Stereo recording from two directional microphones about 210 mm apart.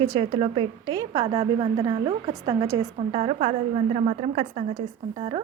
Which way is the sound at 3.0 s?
30° right (ahead or behind).